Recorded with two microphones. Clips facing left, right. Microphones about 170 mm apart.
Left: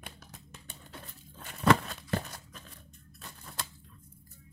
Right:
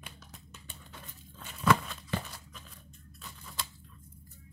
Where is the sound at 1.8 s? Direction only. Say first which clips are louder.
Left 2 dB; 40° left (ahead or behind).